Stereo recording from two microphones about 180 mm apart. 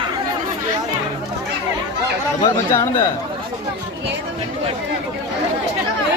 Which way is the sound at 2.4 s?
20° left (ahead or behind).